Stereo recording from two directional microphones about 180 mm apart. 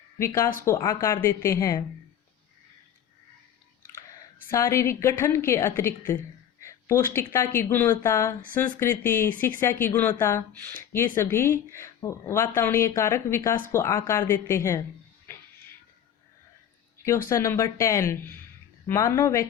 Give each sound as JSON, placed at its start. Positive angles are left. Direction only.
{"t": 0.6, "sound": "speech", "side_deg": 15}
{"t": 4.4, "sound": "speech", "side_deg": 15}
{"t": 15.3, "sound": "music", "side_deg": 10}
{"t": 17.2, "sound": "speech", "side_deg": 15}